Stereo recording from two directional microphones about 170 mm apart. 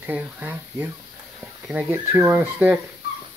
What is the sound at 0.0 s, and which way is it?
Speech, 10° right (ahead or behind).